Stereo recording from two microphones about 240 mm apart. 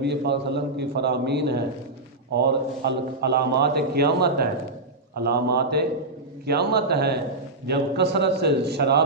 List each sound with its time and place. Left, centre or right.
0.0 s a man's voice: right